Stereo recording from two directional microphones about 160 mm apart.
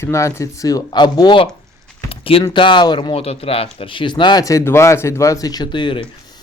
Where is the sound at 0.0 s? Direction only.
15° left (ahead or behind).